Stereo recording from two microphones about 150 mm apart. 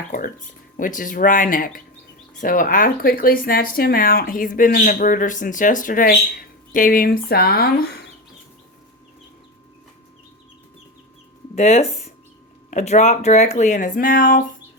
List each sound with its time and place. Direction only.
0.8 s speech: 60° left (ahead or behind); by 7.9 s 90° left
11.5 s speech: 50° left (ahead or behind); by 14.4 s 65° left (ahead or behind)